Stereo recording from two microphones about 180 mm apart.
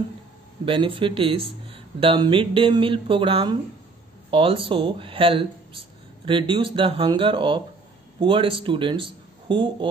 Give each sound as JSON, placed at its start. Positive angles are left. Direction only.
{"t": 0.7, "sound": "a man's voice", "side_deg": -30}